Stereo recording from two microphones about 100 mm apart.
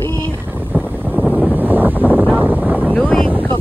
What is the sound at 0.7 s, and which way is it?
Vehicle, 15° right (ahead or behind).